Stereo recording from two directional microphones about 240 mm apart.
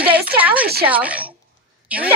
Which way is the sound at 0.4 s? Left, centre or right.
Centre.